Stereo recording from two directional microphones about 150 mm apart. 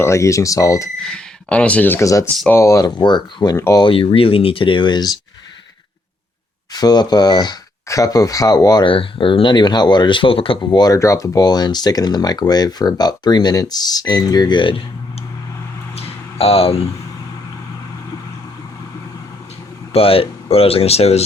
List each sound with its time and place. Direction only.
0.0 s speech: 20° left (ahead or behind)
1.0 s speech: 5° left (ahead or behind)
3.8 s speech: 40° left (ahead or behind)
6.7 s speech: 25° left (ahead or behind)
16.0 s a sound: 40° left (ahead or behind)
19.9 s speech: 40° left (ahead or behind)